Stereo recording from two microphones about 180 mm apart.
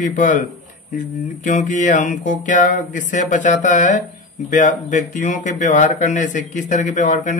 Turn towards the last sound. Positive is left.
turn(degrees=45)  # may be behind; listen again after turning